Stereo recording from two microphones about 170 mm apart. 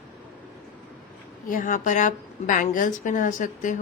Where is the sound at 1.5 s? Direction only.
50° left (ahead or behind).